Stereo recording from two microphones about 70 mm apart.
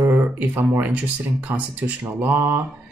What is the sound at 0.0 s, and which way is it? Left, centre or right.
Speech, right.